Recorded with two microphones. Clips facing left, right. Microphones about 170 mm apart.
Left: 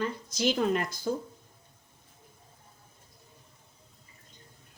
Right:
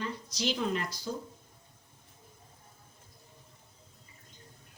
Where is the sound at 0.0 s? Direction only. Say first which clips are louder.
Left 5 dB; 50° left (ahead or behind).